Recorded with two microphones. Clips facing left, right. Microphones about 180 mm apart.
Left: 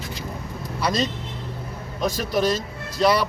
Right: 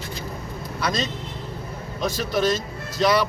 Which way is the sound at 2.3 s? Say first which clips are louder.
Even; 35° left (ahead or behind).